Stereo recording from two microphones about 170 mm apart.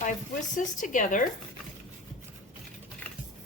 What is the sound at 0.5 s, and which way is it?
Speech, 50° left (ahead or behind).